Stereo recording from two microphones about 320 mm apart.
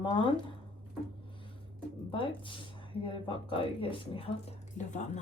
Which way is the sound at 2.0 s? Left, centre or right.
Centre.